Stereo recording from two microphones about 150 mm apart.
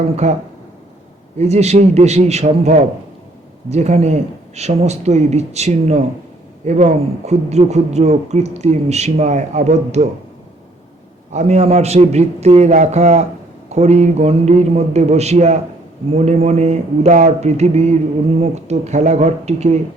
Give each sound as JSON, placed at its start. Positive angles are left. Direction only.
{"t": 0.2, "sound": "speech", "side_deg": -50}
{"t": 1.4, "sound": "speech", "side_deg": -45}
{"t": 11.3, "sound": "speech", "side_deg": -50}